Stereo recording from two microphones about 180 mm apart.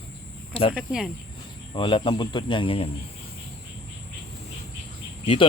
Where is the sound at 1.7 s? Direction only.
30° left (ahead or behind).